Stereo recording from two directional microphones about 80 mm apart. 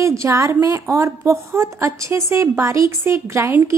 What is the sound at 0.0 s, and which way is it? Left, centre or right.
A woman's voice, right.